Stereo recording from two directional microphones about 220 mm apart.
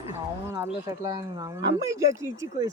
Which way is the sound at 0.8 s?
15° right (ahead or behind).